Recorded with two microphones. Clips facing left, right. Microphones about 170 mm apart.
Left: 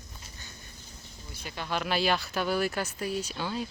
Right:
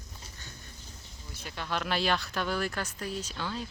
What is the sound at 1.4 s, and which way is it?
Speech, 5° left (ahead or behind).